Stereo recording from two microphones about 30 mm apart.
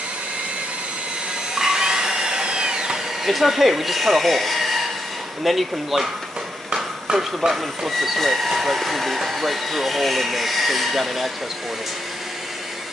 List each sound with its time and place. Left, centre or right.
1.5 s wood: centre
3.3 s speech: centre
6.7 s a sound: right
7.4 s speech: centre